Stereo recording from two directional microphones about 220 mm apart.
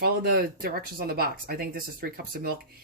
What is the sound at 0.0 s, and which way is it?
Speech, 45° right (ahead or behind).